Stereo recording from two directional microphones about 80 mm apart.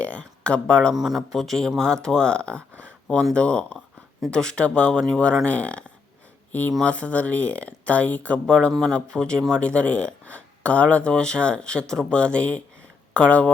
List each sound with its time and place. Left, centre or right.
0.0 s speech: centre
0.9 s speech: centre
2.8 s a sound: centre
3.3 s speech: centre
6.8 s speech: centre